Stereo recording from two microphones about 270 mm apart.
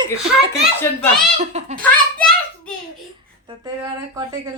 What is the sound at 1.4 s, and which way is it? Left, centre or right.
Speech, right.